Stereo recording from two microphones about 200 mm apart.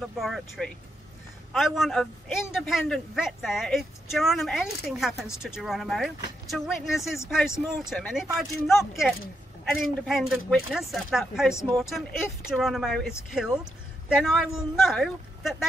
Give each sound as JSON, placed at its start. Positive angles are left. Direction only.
{"t": 0.0, "sound": "a man's voice", "side_deg": 0}